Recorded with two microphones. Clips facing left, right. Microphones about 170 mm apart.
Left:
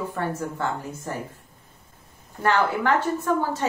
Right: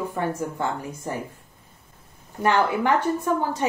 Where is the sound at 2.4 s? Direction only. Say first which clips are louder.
Right 1 dB; 15° right (ahead or behind).